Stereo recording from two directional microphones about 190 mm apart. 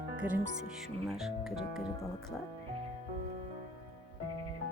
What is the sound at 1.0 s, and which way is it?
Speech, centre (ahead or behind).